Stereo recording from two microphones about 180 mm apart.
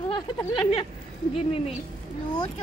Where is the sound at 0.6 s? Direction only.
30° left (ahead or behind).